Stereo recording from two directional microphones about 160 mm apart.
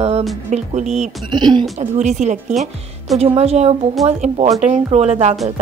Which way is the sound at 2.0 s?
45° right (ahead or behind).